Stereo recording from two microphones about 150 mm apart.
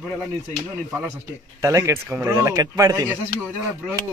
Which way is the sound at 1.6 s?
20° right (ahead or behind).